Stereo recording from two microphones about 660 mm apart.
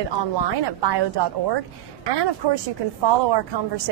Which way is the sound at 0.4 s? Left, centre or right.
Right.